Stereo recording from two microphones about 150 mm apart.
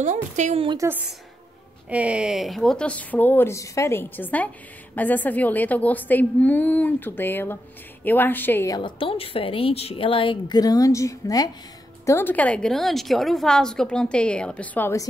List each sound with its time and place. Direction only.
0.0 s a woman's voice: 55° right (ahead or behind)
0.8 s a woman's voice: 10° right (ahead or behind); by 8.7 s 15° left (ahead or behind)
8.7 s a woman's voice: 35° left (ahead or behind); by 15.0 s 10° left (ahead or behind)